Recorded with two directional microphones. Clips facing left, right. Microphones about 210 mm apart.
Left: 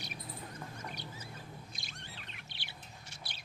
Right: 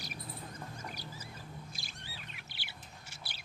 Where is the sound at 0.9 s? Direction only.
5° right (ahead or behind).